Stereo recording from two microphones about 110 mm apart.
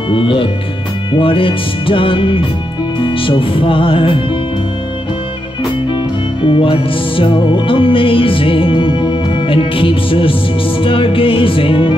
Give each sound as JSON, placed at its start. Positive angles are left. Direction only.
{"t": 0.1, "sound": "music", "side_deg": 50}
{"t": 6.4, "sound": "music", "side_deg": 55}